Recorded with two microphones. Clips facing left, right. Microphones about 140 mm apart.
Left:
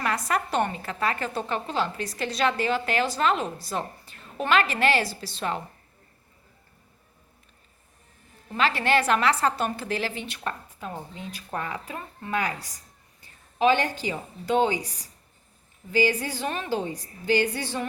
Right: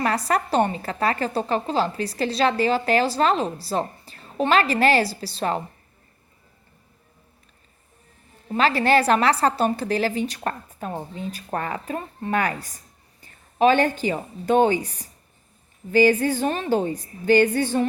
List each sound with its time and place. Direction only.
0.0 s a woman's voice: 35° right (ahead or behind)
8.5 s a woman's voice: 40° right (ahead or behind)
15.9 s speech: 50° right (ahead or behind)